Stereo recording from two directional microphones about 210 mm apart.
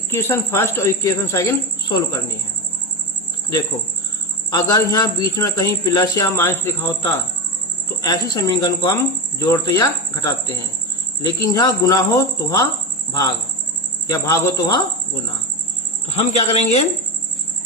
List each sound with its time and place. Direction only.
0.1 s speech: 10° left (ahead or behind)
4.5 s speech: 15° left (ahead or behind)
14.1 s speech: 15° left (ahead or behind)
16.0 s speech: 30° left (ahead or behind)